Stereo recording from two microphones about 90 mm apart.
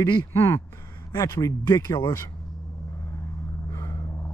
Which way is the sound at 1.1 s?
45° left (ahead or behind).